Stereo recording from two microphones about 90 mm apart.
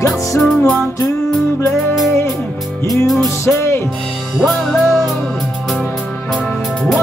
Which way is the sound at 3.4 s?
30° left (ahead or behind).